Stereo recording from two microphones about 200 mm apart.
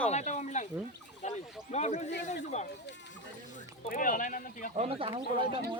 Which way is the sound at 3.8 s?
40° left (ahead or behind).